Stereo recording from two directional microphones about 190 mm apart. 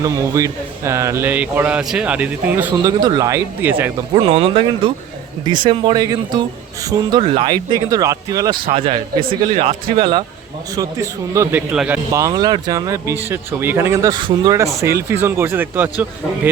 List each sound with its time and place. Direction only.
0.0 s speech: 15° right (ahead or behind)
4.1 s speech: 30° right (ahead or behind)
11.7 s speech: 5° right (ahead or behind)
12.1 s speech: 20° right (ahead or behind)